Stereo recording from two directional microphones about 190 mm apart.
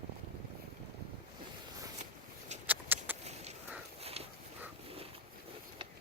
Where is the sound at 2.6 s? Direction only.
10° right (ahead or behind).